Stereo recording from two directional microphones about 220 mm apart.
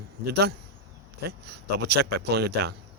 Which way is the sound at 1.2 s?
50° right (ahead or behind).